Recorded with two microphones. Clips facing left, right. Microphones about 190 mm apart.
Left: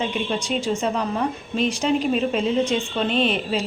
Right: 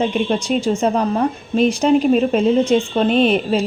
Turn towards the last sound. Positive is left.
turn(degrees=-45)  # may be behind; listen again after turning